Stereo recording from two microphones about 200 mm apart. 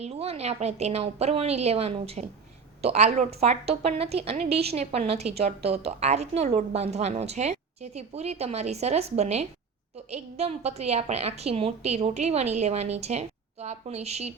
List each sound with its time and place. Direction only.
0.0 s a woman's voice: 30° right (ahead or behind)